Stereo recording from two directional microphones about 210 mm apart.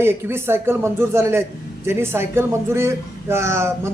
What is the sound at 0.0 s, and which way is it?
A man's voice, 10° right (ahead or behind).